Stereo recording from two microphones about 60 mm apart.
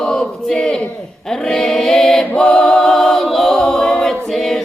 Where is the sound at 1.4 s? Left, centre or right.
Centre.